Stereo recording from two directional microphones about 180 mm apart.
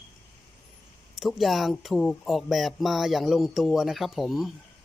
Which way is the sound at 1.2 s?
Centre (ahead or behind).